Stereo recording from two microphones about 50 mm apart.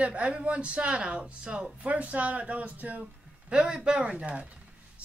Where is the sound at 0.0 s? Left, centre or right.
Right.